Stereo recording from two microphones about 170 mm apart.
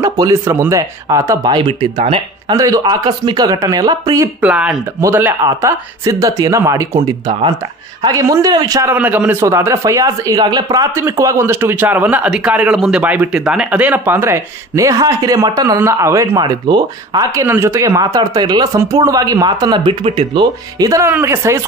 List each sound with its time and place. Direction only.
0.0 s speech: 20° right (ahead or behind)
2.5 s speech: 20° right (ahead or behind)
4.4 s a man's voice: 5° right (ahead or behind)
8.9 s a man's voice: 10° right (ahead or behind)